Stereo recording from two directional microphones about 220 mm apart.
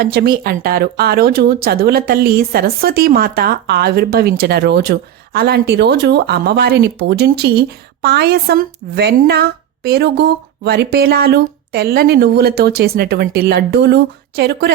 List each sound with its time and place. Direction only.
0.0 s speech: 45° right (ahead or behind)